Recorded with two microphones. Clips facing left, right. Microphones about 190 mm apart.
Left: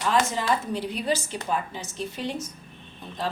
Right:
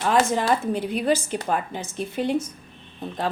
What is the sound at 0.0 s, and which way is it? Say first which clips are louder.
A woman's voice: right 4 dB; 55° right (ahead or behind).